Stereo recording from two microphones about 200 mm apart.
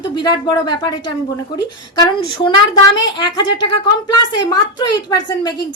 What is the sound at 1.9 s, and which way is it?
A woman's voice, 20° left (ahead or behind).